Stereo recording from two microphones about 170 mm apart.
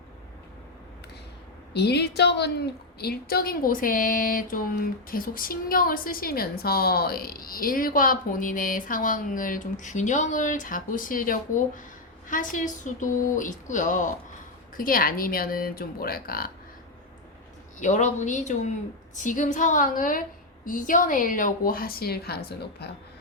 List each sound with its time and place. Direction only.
1.7 s a woman's voice: 75° left (ahead or behind)
3.0 s a woman's voice: 65° left (ahead or behind)
17.7 s a woman's voice: 45° left (ahead or behind); by 22.9 s 70° left (ahead or behind)